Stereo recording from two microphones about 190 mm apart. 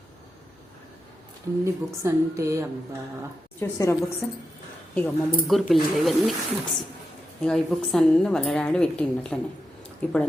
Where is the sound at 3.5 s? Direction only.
10° left (ahead or behind).